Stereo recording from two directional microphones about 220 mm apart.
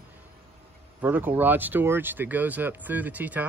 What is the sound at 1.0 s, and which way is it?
Speech, 10° right (ahead or behind).